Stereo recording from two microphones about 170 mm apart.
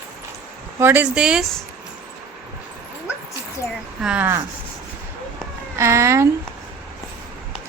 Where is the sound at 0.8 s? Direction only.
10° right (ahead or behind).